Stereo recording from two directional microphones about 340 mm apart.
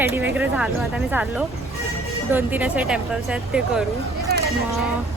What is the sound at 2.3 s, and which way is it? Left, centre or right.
Speech, centre.